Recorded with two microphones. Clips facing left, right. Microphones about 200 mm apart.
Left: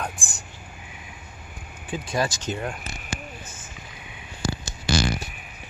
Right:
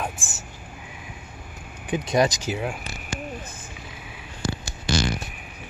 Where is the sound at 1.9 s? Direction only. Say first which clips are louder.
Right 5 dB; 20° right (ahead or behind).